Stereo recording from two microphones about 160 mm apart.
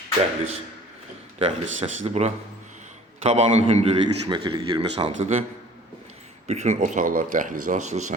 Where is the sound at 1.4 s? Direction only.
40° right (ahead or behind).